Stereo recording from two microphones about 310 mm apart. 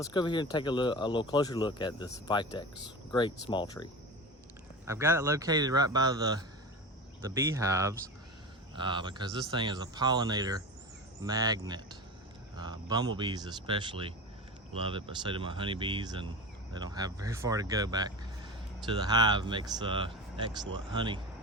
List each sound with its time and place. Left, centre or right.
0.1 s speech: centre
4.9 s speech: centre